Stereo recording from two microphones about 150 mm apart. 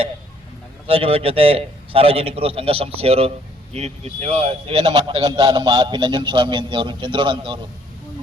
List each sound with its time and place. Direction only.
0.9 s a man's voice: 40° right (ahead or behind)